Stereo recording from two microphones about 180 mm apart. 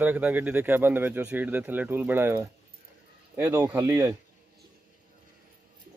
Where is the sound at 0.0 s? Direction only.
10° right (ahead or behind).